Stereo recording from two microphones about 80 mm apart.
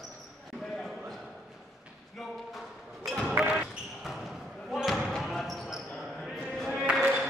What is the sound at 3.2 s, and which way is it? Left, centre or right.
Basketball bounce, centre.